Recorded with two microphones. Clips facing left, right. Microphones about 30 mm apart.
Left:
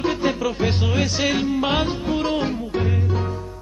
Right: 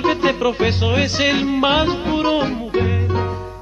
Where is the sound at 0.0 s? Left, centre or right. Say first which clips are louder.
Right 5 dB; right.